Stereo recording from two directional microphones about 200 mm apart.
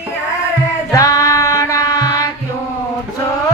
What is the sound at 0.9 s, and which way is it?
Music, 15° left (ahead or behind).